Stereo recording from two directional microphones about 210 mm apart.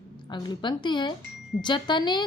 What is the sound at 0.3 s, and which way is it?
A woman's voice, 20° left (ahead or behind).